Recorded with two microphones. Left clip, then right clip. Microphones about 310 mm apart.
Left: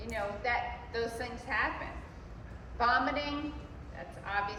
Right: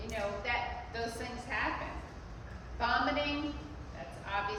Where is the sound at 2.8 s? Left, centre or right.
Centre.